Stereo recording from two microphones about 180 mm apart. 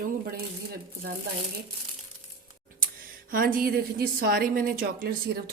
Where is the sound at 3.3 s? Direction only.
50° right (ahead or behind).